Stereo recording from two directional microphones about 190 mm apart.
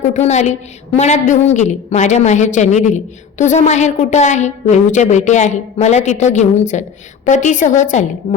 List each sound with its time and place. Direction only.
0.1 s a woman's voice: 35° left (ahead or behind)